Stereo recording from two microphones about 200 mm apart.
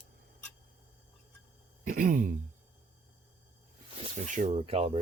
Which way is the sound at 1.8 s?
45° right (ahead or behind).